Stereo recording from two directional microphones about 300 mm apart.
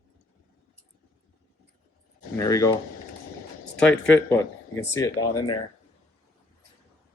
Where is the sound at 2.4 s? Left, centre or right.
Centre.